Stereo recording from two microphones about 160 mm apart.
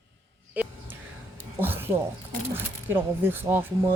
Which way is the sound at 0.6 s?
10° right (ahead or behind).